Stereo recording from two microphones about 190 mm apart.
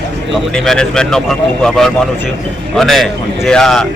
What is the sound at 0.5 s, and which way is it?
Speech, centre (ahead or behind).